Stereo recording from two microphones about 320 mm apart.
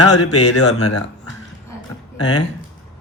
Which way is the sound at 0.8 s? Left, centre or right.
Left.